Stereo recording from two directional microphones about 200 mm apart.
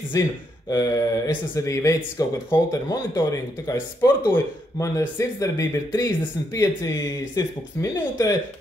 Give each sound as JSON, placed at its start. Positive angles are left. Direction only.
{"t": 0.1, "sound": "speech", "side_deg": 20}